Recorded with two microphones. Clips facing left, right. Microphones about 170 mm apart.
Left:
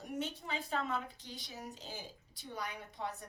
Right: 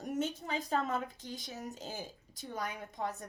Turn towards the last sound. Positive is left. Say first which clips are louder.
# right 4 dB
turn(degrees=-45)  # may be behind; listen again after turning